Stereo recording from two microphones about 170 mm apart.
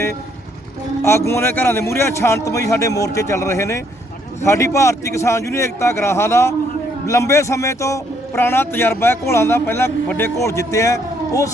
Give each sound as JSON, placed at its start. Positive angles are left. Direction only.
{"t": 1.0, "sound": "speech", "side_deg": 15}